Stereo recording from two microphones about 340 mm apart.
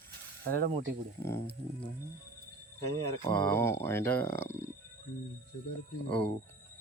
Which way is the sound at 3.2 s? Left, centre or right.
Centre.